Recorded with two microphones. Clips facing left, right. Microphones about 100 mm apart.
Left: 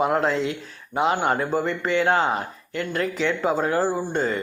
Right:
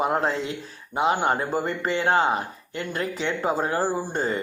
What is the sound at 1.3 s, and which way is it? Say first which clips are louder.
Speech: left 2 dB; 35° right (ahead or behind).